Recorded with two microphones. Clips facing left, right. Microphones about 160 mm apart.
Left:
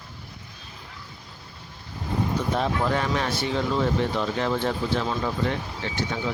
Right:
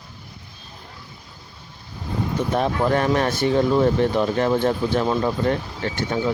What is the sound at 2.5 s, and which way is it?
Speech, 55° right (ahead or behind).